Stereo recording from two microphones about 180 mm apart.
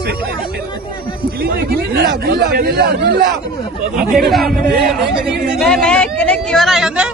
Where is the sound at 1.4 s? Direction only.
60° right (ahead or behind).